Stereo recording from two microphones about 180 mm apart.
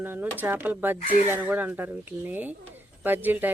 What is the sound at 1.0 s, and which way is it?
Speech, 35° left (ahead or behind).